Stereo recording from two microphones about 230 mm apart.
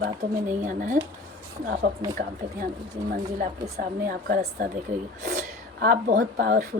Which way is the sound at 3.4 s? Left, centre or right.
Right.